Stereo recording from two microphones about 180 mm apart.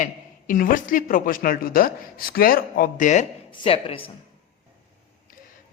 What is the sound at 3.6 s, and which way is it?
Speech, 30° left (ahead or behind).